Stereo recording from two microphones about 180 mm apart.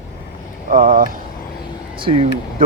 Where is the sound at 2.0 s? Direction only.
30° right (ahead or behind).